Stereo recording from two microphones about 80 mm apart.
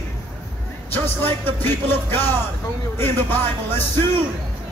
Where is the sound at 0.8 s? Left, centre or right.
Left.